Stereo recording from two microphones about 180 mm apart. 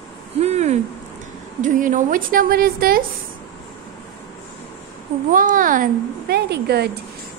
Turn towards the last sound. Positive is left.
turn(degrees=-65)  # may be behind; listen again after turning